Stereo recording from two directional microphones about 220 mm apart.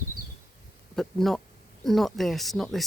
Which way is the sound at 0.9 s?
Centre (ahead or behind).